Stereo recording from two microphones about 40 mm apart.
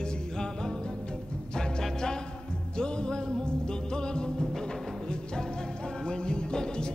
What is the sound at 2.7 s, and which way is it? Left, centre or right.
Music, left.